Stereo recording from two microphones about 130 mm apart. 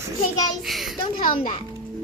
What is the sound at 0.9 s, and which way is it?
Speech, 40° left (ahead or behind).